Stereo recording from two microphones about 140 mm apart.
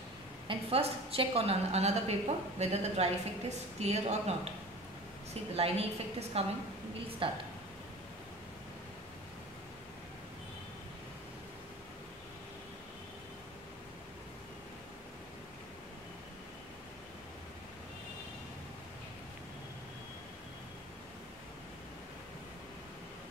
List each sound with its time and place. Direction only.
0.5 s a woman's voice: 45° right (ahead or behind)
5.3 s a woman's voice: 45° right (ahead or behind)